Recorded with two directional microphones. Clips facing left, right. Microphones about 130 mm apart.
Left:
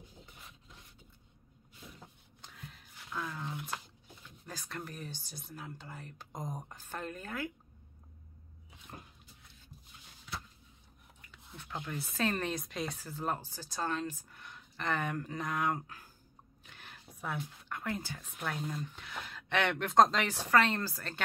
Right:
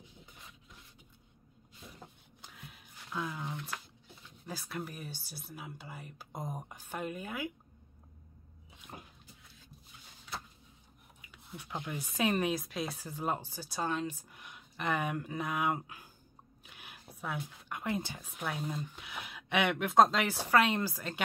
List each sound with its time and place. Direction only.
2.4 s a sound: 5° right (ahead or behind)
4.5 s speech: 10° right (ahead or behind)
8.6 s dog: 5° right (ahead or behind)
11.1 s speech: 10° right (ahead or behind)
16.6 s a sound: 10° right (ahead or behind)
17.6 s speech: 15° right (ahead or behind)
18.2 s speech: 10° right (ahead or behind)